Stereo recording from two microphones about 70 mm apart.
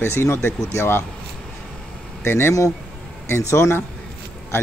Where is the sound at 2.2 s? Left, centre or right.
Left.